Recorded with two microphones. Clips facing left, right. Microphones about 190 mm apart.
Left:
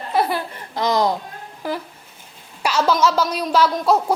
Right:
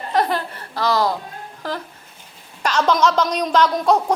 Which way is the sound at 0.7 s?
20° left (ahead or behind).